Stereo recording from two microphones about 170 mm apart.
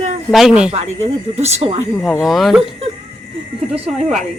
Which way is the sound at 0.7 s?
40° right (ahead or behind).